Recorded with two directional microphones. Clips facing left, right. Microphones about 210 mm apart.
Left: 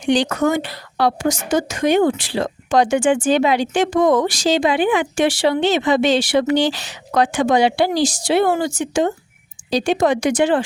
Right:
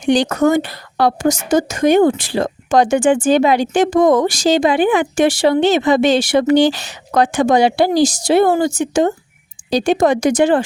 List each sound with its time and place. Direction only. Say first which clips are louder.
0.0 s a woman's voice: right 3 dB; 40° right (ahead or behind)